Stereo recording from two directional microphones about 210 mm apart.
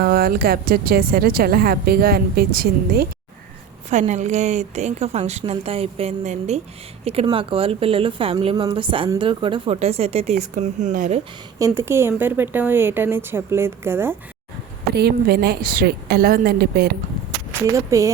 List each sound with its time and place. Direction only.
0.0 s a woman's voice: 45° right (ahead or behind)
3.8 s a woman's voice: 35° right (ahead or behind)
11.6 s speech: 15° right (ahead or behind)
14.9 s a woman's voice: 50° right (ahead or behind)
17.5 s speech: 15° right (ahead or behind)